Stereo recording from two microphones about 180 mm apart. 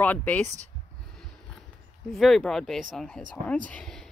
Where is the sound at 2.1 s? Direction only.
Centre (ahead or behind).